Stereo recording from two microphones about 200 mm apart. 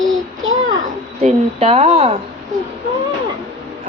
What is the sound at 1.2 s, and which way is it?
Speech, 30° right (ahead or behind).